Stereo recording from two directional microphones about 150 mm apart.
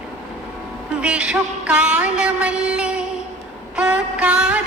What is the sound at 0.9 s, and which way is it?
Music, 5° right (ahead or behind).